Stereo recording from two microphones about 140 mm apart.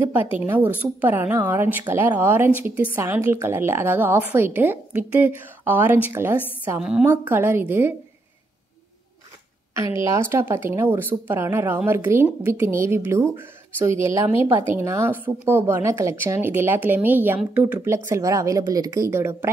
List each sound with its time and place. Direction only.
0.5 s speech: 10° right (ahead or behind)
6.8 s speech: 5° right (ahead or behind)
10.1 s speech: 15° right (ahead or behind)